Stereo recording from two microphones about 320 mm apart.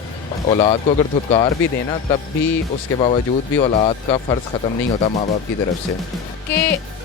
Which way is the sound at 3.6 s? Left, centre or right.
Centre.